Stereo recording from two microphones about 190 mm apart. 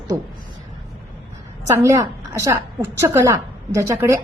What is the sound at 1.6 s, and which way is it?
Speech, 15° right (ahead or behind).